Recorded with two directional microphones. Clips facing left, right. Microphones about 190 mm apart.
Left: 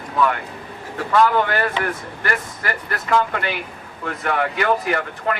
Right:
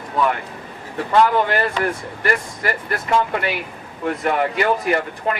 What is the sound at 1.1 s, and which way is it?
Speech, 25° right (ahead or behind).